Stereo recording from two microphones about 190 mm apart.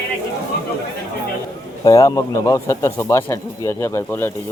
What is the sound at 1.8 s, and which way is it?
Speech, 20° left (ahead or behind).